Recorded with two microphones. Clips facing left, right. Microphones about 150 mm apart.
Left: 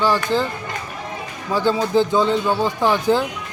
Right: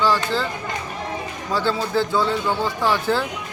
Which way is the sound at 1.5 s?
15° left (ahead or behind).